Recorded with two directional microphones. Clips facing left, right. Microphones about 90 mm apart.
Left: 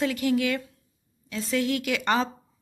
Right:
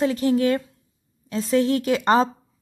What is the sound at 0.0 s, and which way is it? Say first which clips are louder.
A woman's voice: right 5 dB; 30° right (ahead or behind).